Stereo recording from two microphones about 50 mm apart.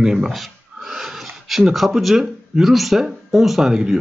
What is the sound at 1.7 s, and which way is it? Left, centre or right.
A man's voice, centre.